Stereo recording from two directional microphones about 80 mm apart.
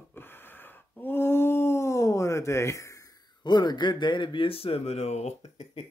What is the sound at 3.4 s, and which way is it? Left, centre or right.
A man's voice, left.